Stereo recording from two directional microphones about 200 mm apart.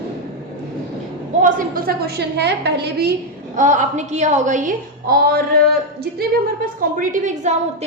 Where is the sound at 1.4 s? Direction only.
45° right (ahead or behind).